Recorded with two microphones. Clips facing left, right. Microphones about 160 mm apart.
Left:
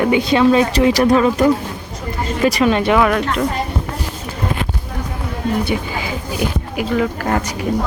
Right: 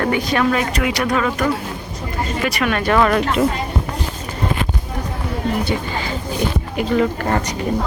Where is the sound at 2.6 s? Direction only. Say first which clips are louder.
Left 5 dB; 25° left (ahead or behind).